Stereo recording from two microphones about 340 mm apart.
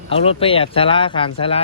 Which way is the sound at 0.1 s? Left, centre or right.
Centre.